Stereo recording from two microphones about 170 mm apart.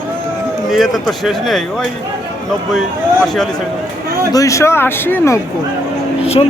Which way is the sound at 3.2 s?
Centre (ahead or behind).